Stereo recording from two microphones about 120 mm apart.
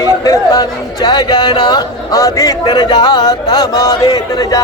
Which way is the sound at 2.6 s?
35° left (ahead or behind).